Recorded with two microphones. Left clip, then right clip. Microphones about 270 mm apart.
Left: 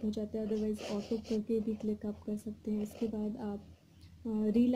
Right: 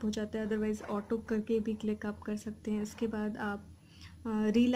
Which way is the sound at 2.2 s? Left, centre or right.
Centre.